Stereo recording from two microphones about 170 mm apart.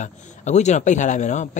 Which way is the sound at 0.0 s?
45° left (ahead or behind).